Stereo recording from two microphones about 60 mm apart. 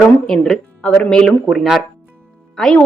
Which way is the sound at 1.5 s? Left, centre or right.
Centre.